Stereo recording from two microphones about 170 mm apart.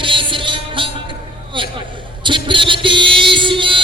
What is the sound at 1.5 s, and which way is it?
Speech, 30° right (ahead or behind).